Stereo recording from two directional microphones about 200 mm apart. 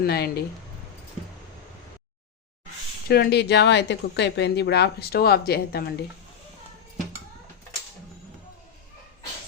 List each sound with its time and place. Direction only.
0.0 s speech: 50° left (ahead or behind)
3.1 s speech: 55° left (ahead or behind)